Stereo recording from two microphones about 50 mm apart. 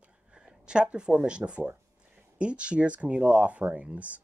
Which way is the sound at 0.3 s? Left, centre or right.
Centre.